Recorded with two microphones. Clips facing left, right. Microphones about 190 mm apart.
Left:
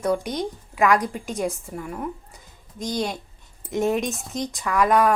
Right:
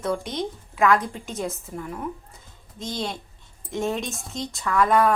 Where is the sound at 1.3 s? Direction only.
15° left (ahead or behind).